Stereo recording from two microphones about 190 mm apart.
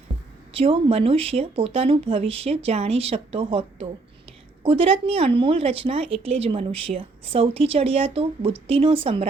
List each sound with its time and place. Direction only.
0.5 s speech: 30° right (ahead or behind)